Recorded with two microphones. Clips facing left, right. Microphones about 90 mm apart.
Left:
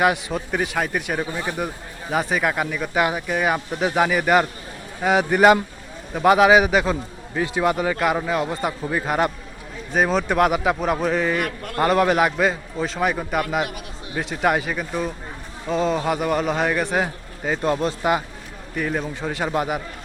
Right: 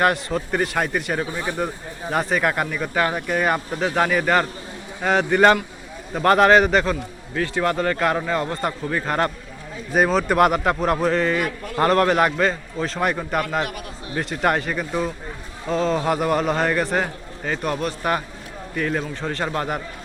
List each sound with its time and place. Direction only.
0.0 s a man's voice: 5° left (ahead or behind)
11.4 s a man's voice: 55° left (ahead or behind)
11.8 s a man's voice: 5° left (ahead or behind)
18.8 s a man's voice: 5° left (ahead or behind)